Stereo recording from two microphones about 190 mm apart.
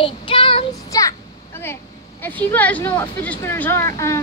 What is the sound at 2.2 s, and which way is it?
Speech, 10° left (ahead or behind).